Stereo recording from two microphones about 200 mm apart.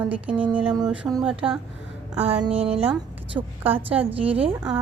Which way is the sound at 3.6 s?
10° right (ahead or behind).